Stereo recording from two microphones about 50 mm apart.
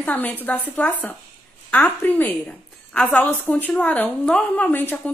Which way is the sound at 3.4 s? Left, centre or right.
Left.